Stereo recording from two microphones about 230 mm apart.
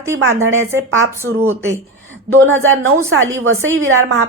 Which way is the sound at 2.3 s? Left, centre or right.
Right.